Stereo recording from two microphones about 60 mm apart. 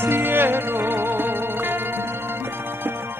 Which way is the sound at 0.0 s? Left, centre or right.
Right.